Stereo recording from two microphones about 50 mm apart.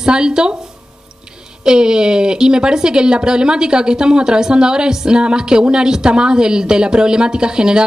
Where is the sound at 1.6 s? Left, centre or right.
Centre.